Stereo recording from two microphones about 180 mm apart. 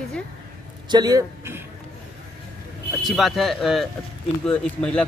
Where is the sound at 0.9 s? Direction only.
20° right (ahead or behind).